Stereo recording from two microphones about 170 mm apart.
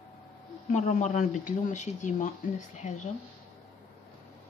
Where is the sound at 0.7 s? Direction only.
45° left (ahead or behind).